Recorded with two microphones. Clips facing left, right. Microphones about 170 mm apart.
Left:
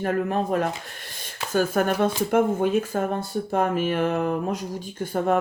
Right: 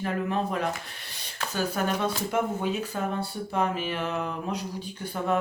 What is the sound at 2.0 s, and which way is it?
Speech, 50° left (ahead or behind).